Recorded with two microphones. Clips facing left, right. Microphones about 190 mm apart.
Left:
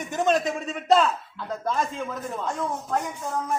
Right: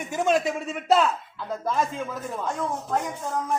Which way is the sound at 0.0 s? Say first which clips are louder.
Even; 5° right (ahead or behind).